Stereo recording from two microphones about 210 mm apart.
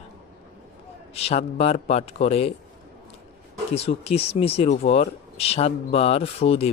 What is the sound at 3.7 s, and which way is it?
Speech, 30° left (ahead or behind).